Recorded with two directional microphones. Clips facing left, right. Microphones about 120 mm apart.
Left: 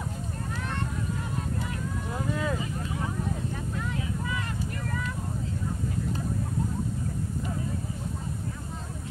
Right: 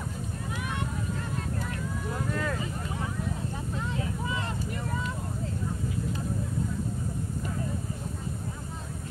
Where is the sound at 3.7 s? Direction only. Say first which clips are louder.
Even; 25° right (ahead or behind).